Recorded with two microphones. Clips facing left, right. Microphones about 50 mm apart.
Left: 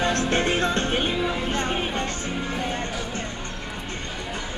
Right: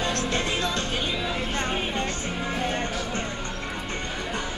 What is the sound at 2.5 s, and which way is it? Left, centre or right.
Music, centre.